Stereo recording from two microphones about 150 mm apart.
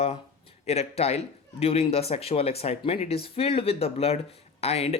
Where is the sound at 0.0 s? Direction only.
40° left (ahead or behind).